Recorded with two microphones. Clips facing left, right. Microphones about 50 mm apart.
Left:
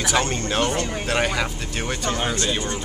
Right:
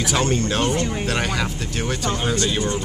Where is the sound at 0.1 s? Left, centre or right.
Centre.